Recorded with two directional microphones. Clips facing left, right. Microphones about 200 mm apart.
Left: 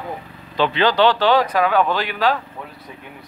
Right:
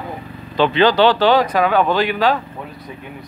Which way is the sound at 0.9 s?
5° right (ahead or behind).